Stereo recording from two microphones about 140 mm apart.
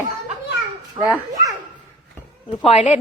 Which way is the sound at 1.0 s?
30° right (ahead or behind).